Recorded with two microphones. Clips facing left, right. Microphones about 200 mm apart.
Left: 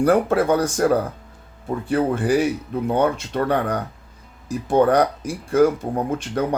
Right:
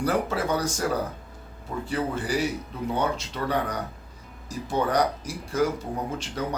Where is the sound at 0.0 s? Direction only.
55° left (ahead or behind).